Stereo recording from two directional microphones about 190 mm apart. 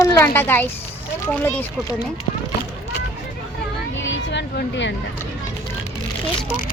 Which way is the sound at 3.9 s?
75° left (ahead or behind).